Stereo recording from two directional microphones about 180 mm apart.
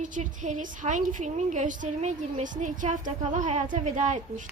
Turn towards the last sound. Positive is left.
turn(degrees=-40)  # may be behind; listen again after turning